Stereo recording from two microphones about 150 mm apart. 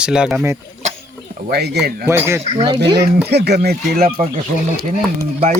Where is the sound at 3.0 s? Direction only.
90° right; by 4.2 s 75° right (ahead or behind).